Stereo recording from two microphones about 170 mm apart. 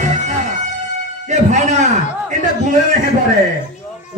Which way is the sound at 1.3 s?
45° right (ahead or behind).